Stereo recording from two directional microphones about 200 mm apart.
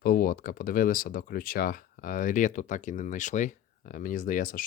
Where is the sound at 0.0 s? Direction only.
45° left (ahead or behind).